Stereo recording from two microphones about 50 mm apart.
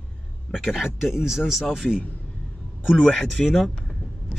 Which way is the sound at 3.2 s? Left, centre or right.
Centre.